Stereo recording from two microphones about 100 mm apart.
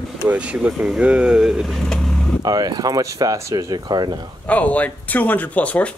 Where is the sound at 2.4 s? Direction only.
40° right (ahead or behind).